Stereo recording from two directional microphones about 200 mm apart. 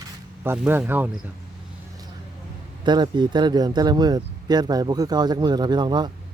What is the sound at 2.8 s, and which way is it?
Speech, 20° right (ahead or behind).